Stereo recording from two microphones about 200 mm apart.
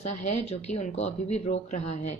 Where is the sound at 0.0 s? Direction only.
35° left (ahead or behind).